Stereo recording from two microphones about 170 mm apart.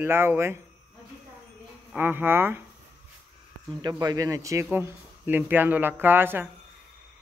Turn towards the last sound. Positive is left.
turn(degrees=-10)  # may be behind; listen again after turning